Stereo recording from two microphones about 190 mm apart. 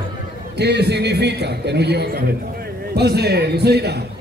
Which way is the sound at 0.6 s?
60° right (ahead or behind).